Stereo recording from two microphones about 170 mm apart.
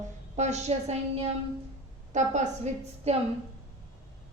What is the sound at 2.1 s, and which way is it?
A woman's voice, 45° right (ahead or behind).